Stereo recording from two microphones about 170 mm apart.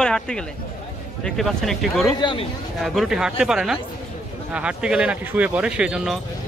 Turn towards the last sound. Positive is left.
turn(degrees=-5)  # may be behind; listen again after turning